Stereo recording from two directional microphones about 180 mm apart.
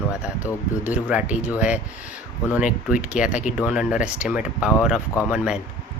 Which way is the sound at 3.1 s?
5° right (ahead or behind).